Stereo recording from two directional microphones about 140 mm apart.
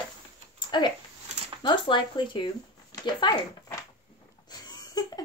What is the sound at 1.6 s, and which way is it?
Speech, 35° left (ahead or behind).